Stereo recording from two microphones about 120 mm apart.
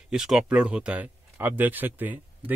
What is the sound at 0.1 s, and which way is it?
Speech, 5° right (ahead or behind).